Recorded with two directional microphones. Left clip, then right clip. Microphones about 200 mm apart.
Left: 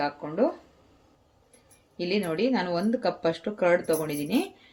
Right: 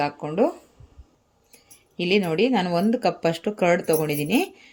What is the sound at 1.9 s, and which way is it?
Speech, 50° right (ahead or behind).